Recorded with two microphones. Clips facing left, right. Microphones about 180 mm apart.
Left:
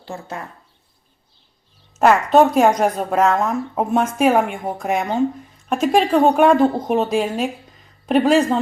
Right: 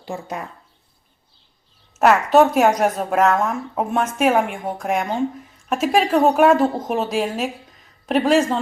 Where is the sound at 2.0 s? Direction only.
5° right (ahead or behind).